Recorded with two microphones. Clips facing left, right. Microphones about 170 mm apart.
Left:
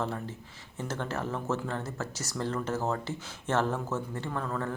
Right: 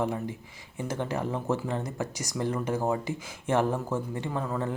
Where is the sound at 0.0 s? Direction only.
15° right (ahead or behind).